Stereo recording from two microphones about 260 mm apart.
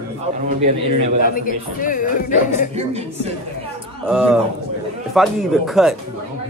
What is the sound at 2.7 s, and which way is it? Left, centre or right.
Speech, right.